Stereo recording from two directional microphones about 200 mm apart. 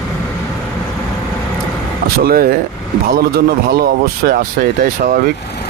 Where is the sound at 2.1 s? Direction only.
50° right (ahead or behind).